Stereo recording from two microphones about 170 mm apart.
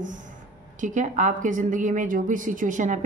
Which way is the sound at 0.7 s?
45° right (ahead or behind).